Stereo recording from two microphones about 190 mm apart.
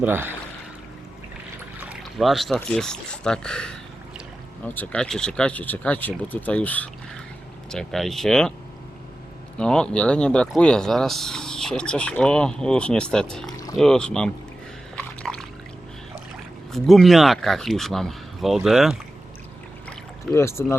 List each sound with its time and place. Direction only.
0.0 s speech: 10° right (ahead or behind)
1.8 s boat: 5° right (ahead or behind)
2.6 s speech: 5° left (ahead or behind)
9.6 s speech: 5° left (ahead or behind)
14.9 s a sound: 5° left (ahead or behind)
16.7 s speech: centre (ahead or behind)
20.3 s speech: 15° left (ahead or behind)